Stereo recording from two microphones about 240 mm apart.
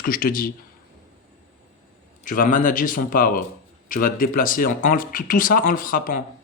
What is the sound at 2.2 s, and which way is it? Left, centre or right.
Speech, left.